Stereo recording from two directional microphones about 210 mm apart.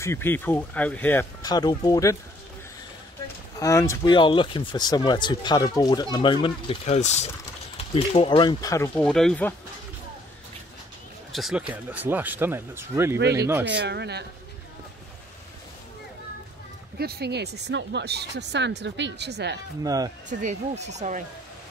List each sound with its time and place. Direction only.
0.0 s speech: 10° left (ahead or behind)
3.5 s speech: 15° left (ahead or behind)
8.9 s speech: 5° left (ahead or behind)
11.3 s speech: 5° right (ahead or behind)
13.7 s speech: 55° right (ahead or behind)
17.0 s speech: 50° right (ahead or behind)
19.8 s speech: 15° right (ahead or behind)
20.2 s speech: 35° right (ahead or behind)